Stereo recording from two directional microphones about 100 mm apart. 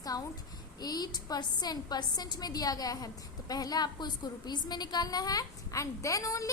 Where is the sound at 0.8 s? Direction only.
40° left (ahead or behind).